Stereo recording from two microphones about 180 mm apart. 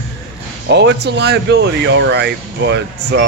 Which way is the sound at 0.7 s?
75° right (ahead or behind).